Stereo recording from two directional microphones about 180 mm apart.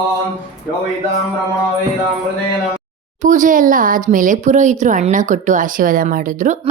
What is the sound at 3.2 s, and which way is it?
Speech, 45° right (ahead or behind).